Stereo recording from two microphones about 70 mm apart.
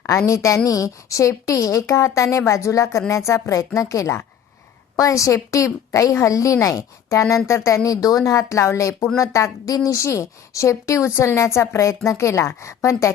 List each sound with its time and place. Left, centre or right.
0.0 s a woman's voice: left
7.9 s a woman's voice: left